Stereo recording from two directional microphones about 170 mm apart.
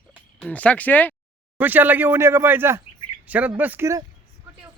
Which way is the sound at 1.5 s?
10° right (ahead or behind).